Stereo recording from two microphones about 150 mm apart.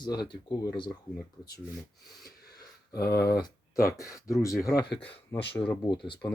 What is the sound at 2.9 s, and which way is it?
Speech, 90° left.